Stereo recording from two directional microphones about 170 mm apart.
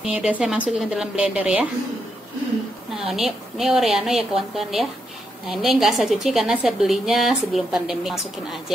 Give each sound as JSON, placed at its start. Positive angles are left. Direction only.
{"t": 0.0, "sound": "a woman's voice", "side_deg": -5}
{"t": 3.0, "sound": "a woman's voice", "side_deg": 0}